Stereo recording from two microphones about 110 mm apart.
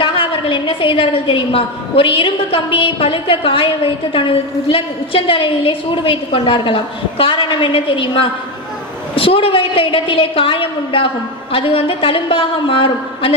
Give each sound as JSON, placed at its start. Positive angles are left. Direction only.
{"t": 0.0, "sound": "a woman's voice", "side_deg": 55}